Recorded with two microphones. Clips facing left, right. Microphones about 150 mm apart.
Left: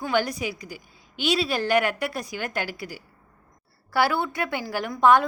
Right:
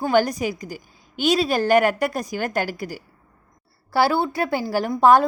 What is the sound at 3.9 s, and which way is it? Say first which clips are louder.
A woman's voice: right 4 dB; 30° right (ahead or behind).